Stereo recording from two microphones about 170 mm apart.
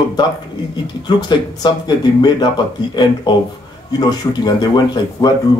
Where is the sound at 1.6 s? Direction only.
25° left (ahead or behind).